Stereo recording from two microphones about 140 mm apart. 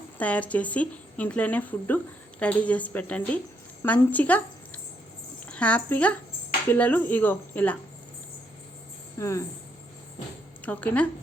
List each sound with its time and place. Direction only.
0.2 s speech: 10° left (ahead or behind)
9.1 s speech: 20° left (ahead or behind)
10.7 s speech: 10° left (ahead or behind)